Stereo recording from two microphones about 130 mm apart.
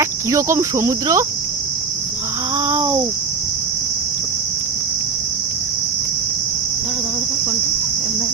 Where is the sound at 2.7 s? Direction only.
15° right (ahead or behind).